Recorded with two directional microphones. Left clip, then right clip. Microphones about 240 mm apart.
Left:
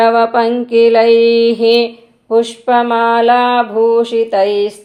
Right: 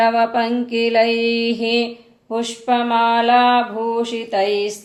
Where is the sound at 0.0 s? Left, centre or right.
Centre.